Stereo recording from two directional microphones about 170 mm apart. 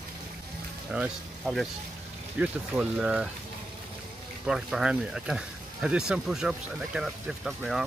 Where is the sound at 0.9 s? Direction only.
5° right (ahead or behind).